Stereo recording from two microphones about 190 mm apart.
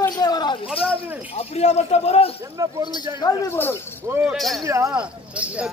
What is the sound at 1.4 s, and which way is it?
Speech, 35° left (ahead or behind).